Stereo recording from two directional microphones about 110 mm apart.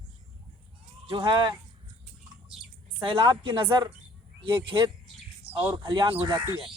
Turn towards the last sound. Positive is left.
turn(degrees=-40)  # may be behind; listen again after turning